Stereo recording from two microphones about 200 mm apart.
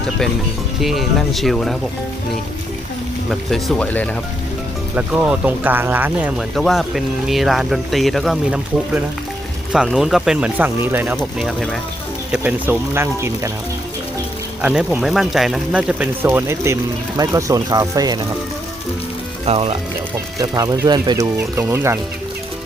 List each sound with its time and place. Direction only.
0.8 s speech: centre (ahead or behind)
3.2 s speech: 5° left (ahead or behind)
4.9 s speech: 5° right (ahead or behind)
14.6 s speech: 5° right (ahead or behind)
19.5 s speech: 30° right (ahead or behind)
20.4 s speech: 20° right (ahead or behind)